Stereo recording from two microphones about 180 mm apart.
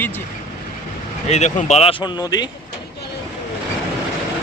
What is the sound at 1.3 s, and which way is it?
Speech, 40° left (ahead or behind).